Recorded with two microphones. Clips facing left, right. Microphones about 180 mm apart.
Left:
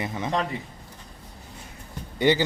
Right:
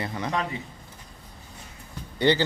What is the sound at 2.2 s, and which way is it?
Speech, 15° left (ahead or behind).